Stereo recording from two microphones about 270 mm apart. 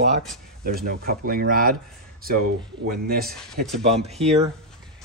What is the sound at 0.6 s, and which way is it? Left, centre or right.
Speech, right.